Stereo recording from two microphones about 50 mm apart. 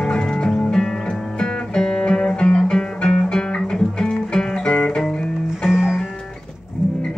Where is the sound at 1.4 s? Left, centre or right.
Centre.